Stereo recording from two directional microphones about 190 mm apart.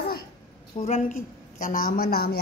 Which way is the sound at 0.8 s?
40° left (ahead or behind).